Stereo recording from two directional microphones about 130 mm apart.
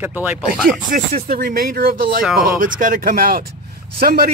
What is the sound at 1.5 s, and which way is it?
Speech, 90° right.